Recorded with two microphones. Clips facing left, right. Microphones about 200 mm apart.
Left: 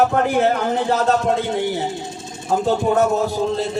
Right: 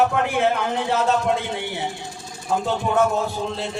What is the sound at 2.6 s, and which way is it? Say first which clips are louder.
A man's voice: left 4 dB; 40° left (ahead or behind).